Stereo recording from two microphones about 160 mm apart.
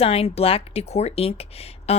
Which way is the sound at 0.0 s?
35° left (ahead or behind).